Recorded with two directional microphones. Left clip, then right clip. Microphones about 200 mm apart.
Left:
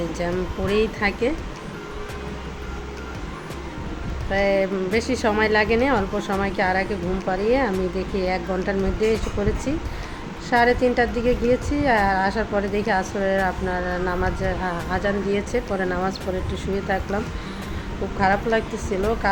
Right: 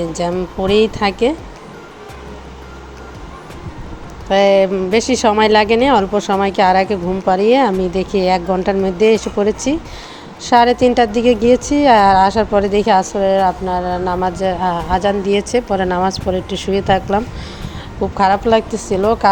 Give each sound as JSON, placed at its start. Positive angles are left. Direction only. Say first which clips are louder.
{"t": 0.2, "sound": "a woman's voice", "louder": "right 8 dB", "side_deg": -35}
{"t": 4.3, "sound": "a woman's voice", "louder": "right 10 dB", "side_deg": -40}
{"t": 18.2, "sound": "a woman's voice", "louder": "right 8 dB", "side_deg": -35}